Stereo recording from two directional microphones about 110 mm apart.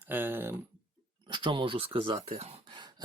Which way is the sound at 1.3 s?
45° right (ahead or behind).